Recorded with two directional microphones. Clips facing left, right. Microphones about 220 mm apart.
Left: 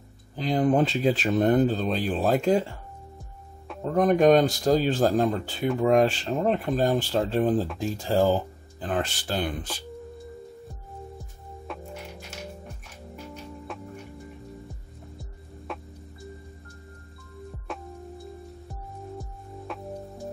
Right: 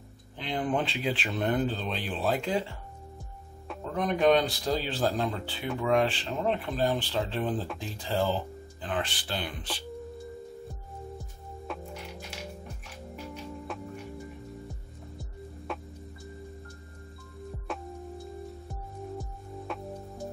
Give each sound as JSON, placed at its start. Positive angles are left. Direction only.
{"t": 0.4, "sound": "speech", "side_deg": 40}
{"t": 3.8, "sound": "speech", "side_deg": 45}
{"t": 13.7, "sound": "music", "side_deg": 0}
{"t": 15.7, "sound": "music", "side_deg": 0}
{"t": 17.7, "sound": "music", "side_deg": 0}
{"t": 19.7, "sound": "music", "side_deg": 0}